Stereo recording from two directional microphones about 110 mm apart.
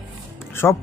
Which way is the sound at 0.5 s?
25° left (ahead or behind).